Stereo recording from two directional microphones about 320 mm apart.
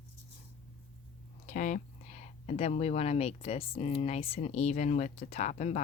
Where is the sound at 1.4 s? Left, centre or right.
Left.